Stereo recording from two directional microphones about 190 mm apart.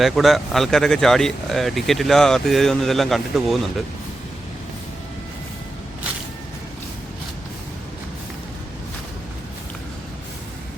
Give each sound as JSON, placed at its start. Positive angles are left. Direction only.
{"t": 0.0, "sound": "speech", "side_deg": 0}